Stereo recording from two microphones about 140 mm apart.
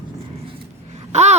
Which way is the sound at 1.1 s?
55° right (ahead or behind).